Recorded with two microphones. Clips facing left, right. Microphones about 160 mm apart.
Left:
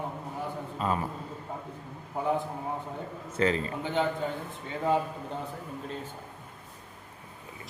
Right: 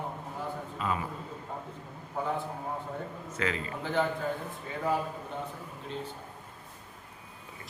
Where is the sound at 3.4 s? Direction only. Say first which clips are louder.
Left 6 dB; 35° left (ahead or behind).